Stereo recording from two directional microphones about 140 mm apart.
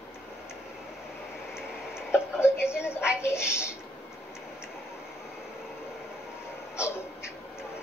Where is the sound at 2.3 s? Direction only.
20° left (ahead or behind).